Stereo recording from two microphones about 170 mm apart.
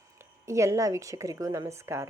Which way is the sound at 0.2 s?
15° right (ahead or behind).